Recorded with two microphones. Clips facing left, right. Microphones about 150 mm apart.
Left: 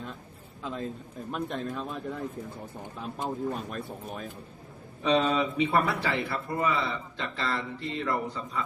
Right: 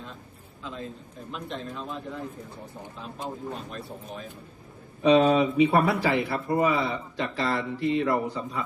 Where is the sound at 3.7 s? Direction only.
50° left (ahead or behind).